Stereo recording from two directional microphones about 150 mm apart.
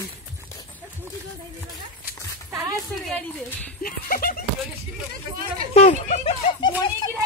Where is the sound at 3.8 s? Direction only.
75° left (ahead or behind).